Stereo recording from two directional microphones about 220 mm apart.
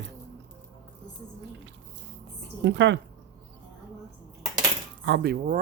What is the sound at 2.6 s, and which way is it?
Speech, 55° right (ahead or behind).